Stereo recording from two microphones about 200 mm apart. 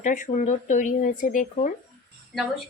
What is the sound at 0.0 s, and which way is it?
Speech, 40° left (ahead or behind).